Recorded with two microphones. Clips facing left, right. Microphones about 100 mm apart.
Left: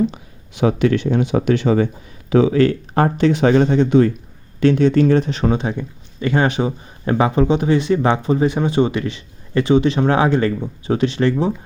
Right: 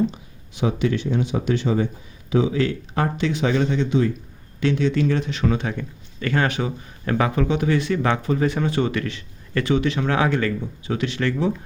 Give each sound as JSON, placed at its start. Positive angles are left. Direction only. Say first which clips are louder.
{"t": 0.1, "sound": "speech", "louder": "left 3 dB", "side_deg": 70}
{"t": 2.3, "sound": "speech", "louder": "left 7 dB", "side_deg": 60}